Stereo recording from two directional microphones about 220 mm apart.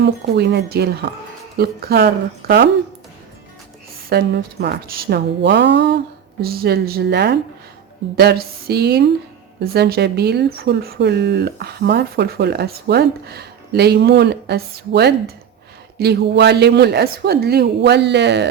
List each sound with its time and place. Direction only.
0.0 s speech: 50° right (ahead or behind)
4.1 s speech: 50° right (ahead or behind)